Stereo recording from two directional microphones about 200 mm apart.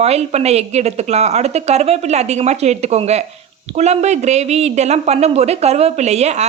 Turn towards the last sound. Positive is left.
turn(degrees=-35)  # may be behind; listen again after turning